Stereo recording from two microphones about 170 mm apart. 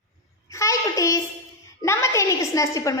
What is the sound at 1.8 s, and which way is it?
A woman's voice, 15° left (ahead or behind).